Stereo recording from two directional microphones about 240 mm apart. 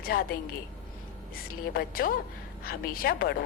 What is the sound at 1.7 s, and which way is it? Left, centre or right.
Speech, left.